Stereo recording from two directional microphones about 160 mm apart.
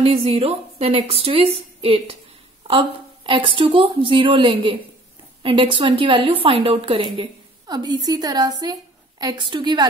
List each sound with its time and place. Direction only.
0.0 s a woman's voice: 40° right (ahead or behind)